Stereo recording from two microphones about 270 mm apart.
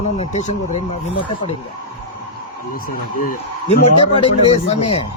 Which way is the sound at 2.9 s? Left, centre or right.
Left.